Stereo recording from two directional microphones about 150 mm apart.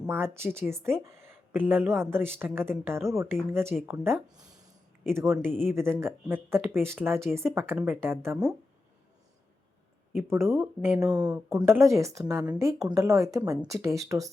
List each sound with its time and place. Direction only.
0.0 s speech: 15° right (ahead or behind)
10.2 s speech: 15° right (ahead or behind)